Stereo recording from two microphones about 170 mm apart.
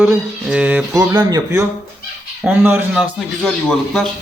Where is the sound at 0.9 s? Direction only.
20° right (ahead or behind).